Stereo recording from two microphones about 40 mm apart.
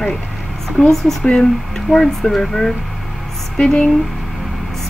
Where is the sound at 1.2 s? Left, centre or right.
Centre.